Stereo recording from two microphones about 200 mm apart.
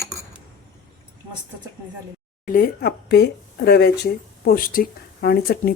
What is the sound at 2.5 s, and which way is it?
Speech, 50° left (ahead or behind).